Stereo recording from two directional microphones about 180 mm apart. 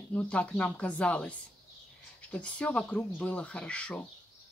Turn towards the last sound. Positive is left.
turn(degrees=5)  # may be behind; listen again after turning